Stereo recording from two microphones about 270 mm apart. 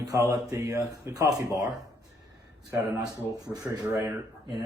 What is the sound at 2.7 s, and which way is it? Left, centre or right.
Speech, centre.